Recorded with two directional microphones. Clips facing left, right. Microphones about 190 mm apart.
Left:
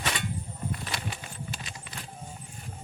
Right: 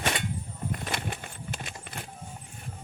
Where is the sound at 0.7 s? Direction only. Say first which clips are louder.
Right 3 dB; 55° right (ahead or behind).